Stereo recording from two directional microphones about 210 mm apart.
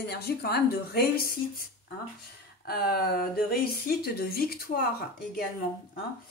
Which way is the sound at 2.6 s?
45° left (ahead or behind).